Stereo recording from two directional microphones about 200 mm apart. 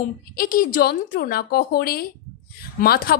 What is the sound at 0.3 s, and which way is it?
Speech, 45° left (ahead or behind).